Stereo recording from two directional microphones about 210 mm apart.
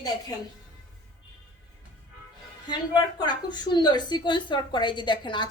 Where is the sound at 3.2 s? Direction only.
20° left (ahead or behind).